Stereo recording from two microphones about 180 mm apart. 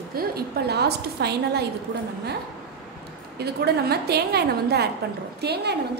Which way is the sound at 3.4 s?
65° right (ahead or behind).